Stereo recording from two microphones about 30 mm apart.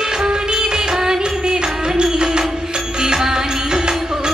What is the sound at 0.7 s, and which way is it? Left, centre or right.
Music, centre.